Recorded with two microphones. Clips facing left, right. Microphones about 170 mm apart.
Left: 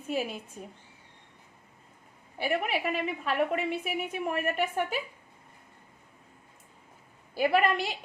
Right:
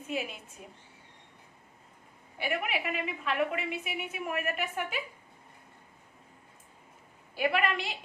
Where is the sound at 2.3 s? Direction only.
35° left (ahead or behind).